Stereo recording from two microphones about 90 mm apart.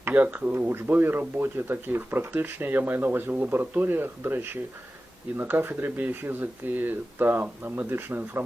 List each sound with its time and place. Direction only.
0.0 s speech: 20° right (ahead or behind)